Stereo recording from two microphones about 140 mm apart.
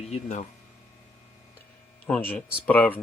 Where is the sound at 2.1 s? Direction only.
10° left (ahead or behind).